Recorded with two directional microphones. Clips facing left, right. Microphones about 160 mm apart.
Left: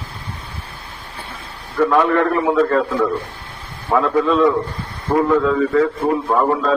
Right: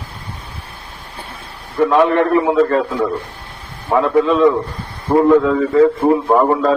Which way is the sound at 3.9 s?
20° right (ahead or behind).